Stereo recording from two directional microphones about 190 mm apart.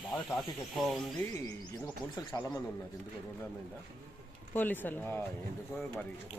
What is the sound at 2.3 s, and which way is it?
Speech, 10° left (ahead or behind).